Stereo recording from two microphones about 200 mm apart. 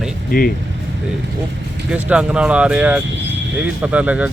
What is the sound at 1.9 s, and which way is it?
Speech, 5° right (ahead or behind).